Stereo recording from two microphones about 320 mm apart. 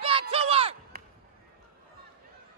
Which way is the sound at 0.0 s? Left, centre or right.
Centre.